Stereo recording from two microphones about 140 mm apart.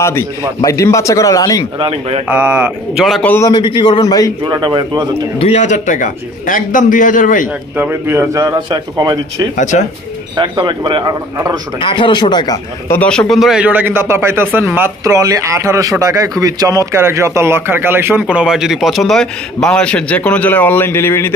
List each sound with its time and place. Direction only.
0.0 s a man's voice: 20° left (ahead or behind)
1.8 s a man's voice: 45° right (ahead or behind)
2.2 s a man's voice: 15° right (ahead or behind)
3.0 s a man's voice: centre (ahead or behind)
3.3 s a man's voice: 20° left (ahead or behind)
3.5 s speech: 35° left (ahead or behind)
4.5 s a man's voice: 35° right (ahead or behind)
5.4 s a man's voice: 55° left (ahead or behind); by 7.4 s 70° left (ahead or behind)
7.7 s a man's voice: 15° right (ahead or behind)
9.6 s speech: 60° left (ahead or behind)
10.3 s a man's voice: 30° right (ahead or behind)
11.8 s speech: 35° left (ahead or behind)
12.8 s speech: 15° left (ahead or behind)
13.1 s a man's voice: 5° left (ahead or behind)